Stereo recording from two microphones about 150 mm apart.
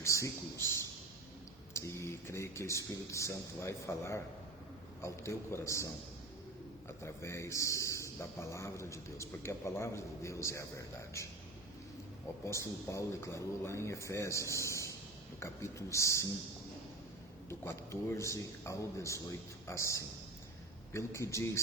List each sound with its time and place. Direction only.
0.0 s speech: 20° left (ahead or behind)
1.7 s a man's voice: 20° left (ahead or behind)
7.0 s a man's voice: 20° left (ahead or behind)
12.5 s a man's voice: 20° left (ahead or behind)
17.5 s a man's voice: 15° left (ahead or behind)